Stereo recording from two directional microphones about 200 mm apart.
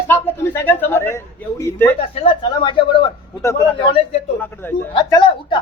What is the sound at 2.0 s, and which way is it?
A man's voice, 25° left (ahead or behind).